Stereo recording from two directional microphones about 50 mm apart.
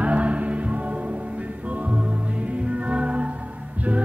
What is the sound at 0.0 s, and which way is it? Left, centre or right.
Music, right.